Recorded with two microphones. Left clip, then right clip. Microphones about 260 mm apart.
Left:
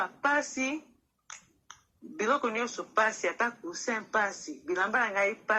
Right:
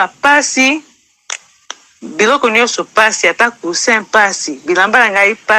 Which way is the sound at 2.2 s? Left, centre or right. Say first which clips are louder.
Right 19 dB; right.